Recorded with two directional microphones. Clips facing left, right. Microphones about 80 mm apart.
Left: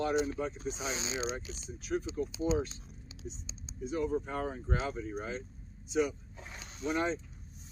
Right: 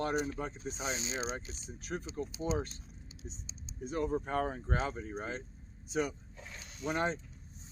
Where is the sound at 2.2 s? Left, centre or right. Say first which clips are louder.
Left 4 dB; right.